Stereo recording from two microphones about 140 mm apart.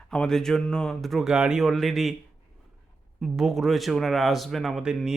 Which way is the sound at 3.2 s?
5° right (ahead or behind).